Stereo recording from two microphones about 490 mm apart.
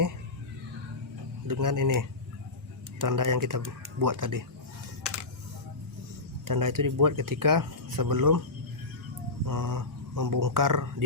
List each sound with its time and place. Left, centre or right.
1.5 s speech: right
6.4 s speech: right
9.5 s speech: right